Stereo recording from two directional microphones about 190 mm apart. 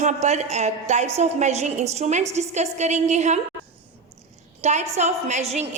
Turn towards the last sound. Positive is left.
turn(degrees=-35)  # may be behind; listen again after turning